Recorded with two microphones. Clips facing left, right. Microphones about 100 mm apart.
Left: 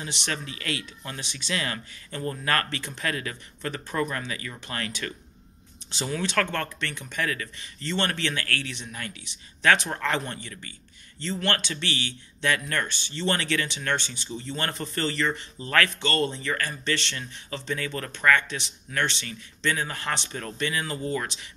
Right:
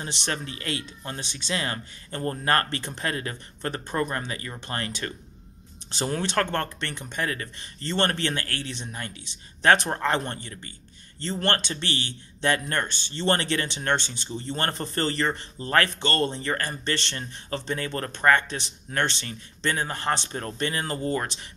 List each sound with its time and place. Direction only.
0.0 s a man's voice: 35° right (ahead or behind)
5.9 s speech: 40° right (ahead or behind)
6.2 s a man's voice: 30° right (ahead or behind)